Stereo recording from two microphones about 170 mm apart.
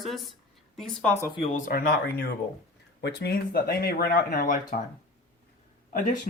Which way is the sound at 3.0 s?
80° left.